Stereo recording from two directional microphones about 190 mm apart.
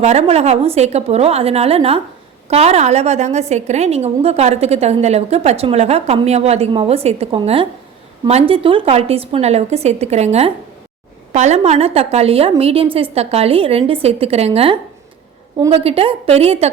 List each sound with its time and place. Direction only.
0.0 s a woman's voice: 35° right (ahead or behind)